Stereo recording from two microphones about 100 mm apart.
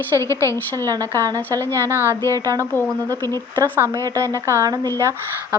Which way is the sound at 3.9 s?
30° right (ahead or behind).